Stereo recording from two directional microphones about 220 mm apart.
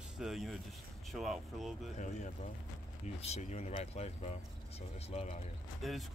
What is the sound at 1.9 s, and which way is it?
Speech, 35° left (ahead or behind).